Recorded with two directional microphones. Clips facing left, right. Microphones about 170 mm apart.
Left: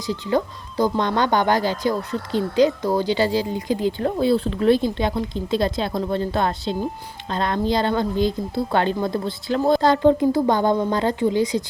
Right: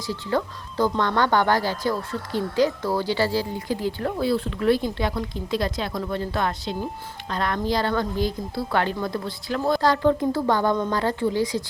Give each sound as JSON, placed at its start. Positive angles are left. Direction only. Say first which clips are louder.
{"t": 0.0, "sound": "speech", "louder": "left 3 dB", "side_deg": 15}